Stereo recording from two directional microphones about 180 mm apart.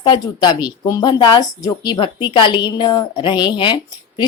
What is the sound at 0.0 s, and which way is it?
Speech, 25° left (ahead or behind).